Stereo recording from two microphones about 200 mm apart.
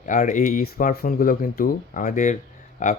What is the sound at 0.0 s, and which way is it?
Speech, 40° left (ahead or behind).